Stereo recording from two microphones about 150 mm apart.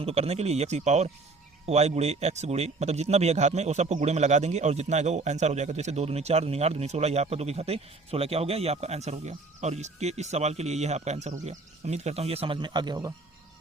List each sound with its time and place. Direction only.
0.0 s speech: 45° right (ahead or behind); by 13.1 s 25° right (ahead or behind)